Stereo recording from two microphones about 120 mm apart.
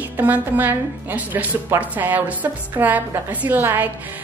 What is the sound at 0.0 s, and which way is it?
A woman's voice, 15° right (ahead or behind).